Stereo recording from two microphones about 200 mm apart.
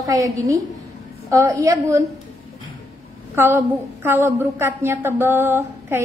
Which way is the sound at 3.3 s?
10° right (ahead or behind).